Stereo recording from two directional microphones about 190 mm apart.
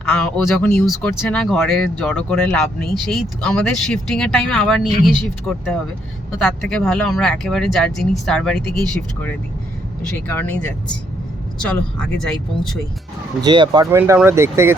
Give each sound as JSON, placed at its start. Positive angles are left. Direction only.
{"t": 0.1, "sound": "speech", "side_deg": 5}
{"t": 10.2, "sound": "speech", "side_deg": 10}
{"t": 11.7, "sound": "speech", "side_deg": 5}
{"t": 13.4, "sound": "speech", "side_deg": -25}
{"t": 13.9, "sound": "speech", "side_deg": -10}